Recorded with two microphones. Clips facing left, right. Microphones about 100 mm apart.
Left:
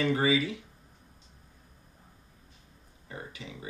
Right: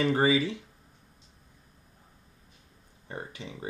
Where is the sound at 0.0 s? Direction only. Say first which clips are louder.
Right 2 dB; 35° right (ahead or behind).